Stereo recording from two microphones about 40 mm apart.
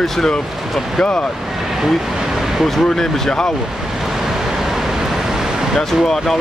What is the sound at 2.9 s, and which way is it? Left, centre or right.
Speech, centre.